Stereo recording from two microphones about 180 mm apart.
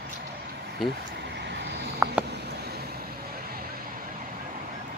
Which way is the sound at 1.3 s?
70° right (ahead or behind).